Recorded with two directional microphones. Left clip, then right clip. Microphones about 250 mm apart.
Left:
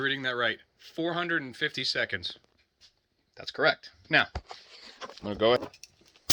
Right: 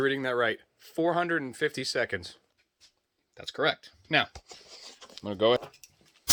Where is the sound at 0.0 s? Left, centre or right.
Centre.